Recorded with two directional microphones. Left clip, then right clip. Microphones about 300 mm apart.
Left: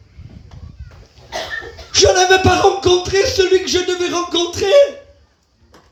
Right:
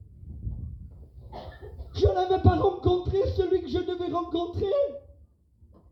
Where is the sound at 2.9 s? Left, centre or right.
Left.